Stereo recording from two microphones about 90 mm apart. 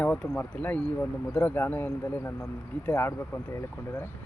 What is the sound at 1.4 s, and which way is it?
Speech, 25° left (ahead or behind).